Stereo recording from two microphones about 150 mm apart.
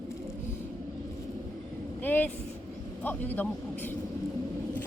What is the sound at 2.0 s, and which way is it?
A woman's voice, 10° left (ahead or behind).